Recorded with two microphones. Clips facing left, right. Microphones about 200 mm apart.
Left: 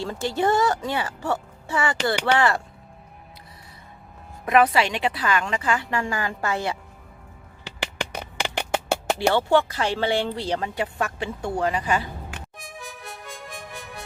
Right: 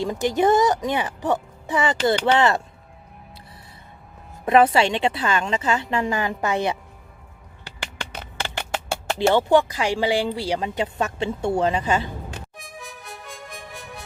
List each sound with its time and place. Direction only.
0.0 s speech: 15° right (ahead or behind)
4.4 s a woman's voice: 25° right (ahead or behind)
8.2 s a sound: 15° left (ahead or behind)
9.3 s speech: 15° right (ahead or behind)
10.8 s a woman's voice: 20° right (ahead or behind)
12.5 s music: centre (ahead or behind)